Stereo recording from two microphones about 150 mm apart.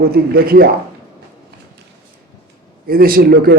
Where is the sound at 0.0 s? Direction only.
90° right.